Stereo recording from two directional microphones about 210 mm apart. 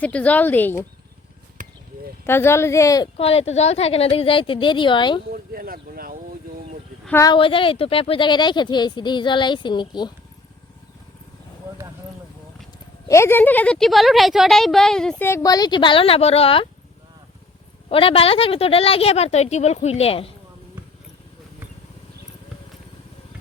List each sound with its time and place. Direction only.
0.0 s speech: 5° left (ahead or behind)
1.6 s a sound: 40° right (ahead or behind)
2.2 s speech: 10° left (ahead or behind)
3.2 s speech: 30° left (ahead or behind)
5.3 s speech: 45° right (ahead or behind)
7.0 s speech: 10° left (ahead or behind)
13.1 s speech: 10° left (ahead or behind)
17.8 s speech: 25° left (ahead or behind)